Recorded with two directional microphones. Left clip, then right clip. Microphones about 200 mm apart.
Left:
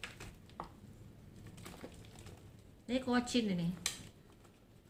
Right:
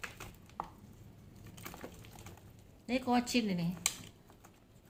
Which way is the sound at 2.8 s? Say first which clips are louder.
Right 3 dB; 15° right (ahead or behind).